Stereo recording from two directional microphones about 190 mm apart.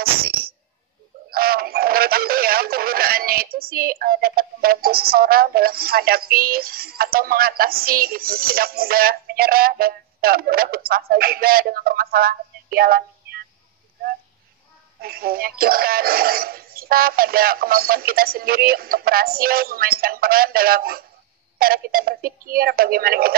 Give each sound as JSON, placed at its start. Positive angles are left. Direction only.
{"t": 0.0, "sound": "speech", "side_deg": -50}
{"t": 15.0, "sound": "speech", "side_deg": -50}